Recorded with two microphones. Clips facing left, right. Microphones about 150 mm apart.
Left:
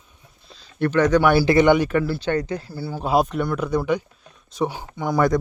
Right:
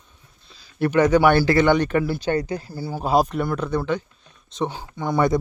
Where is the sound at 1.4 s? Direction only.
15° left (ahead or behind).